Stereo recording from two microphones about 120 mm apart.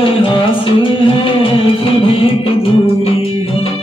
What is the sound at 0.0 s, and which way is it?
Music, 45° left (ahead or behind).